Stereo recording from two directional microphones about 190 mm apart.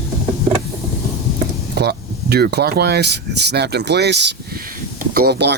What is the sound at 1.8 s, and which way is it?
Speech, 60° right (ahead or behind).